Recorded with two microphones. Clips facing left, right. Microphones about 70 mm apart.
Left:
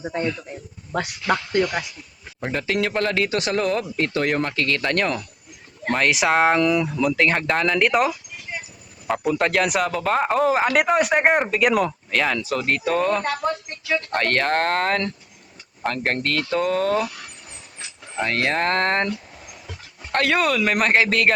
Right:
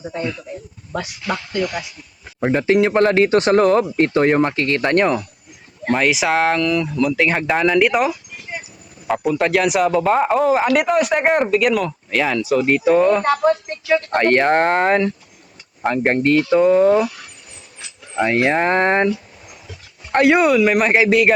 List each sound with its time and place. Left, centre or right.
2.4 s speech: right
5.8 s a man's voice: centre
6.6 s speech: centre
6.8 s a man's voice: centre
7.3 s a man's voice: centre
11.7 s speech: centre
12.1 s speech: centre
18.2 s speech: centre
20.1 s speech: centre
20.6 s speech: centre